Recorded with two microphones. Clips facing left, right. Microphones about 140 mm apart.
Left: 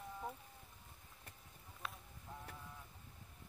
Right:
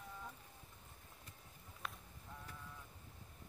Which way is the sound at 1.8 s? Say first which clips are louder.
Even; centre (ahead or behind).